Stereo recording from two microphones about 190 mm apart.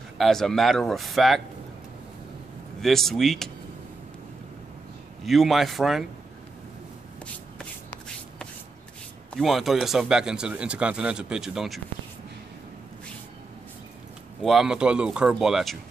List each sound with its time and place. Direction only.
0.2 s speech: centre (ahead or behind)
2.8 s speech: centre (ahead or behind)
5.2 s speech: centre (ahead or behind)
9.3 s speech: centre (ahead or behind)
14.4 s speech: centre (ahead or behind)